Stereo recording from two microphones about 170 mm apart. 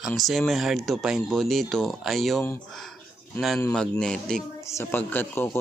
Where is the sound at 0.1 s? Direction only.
Centre (ahead or behind).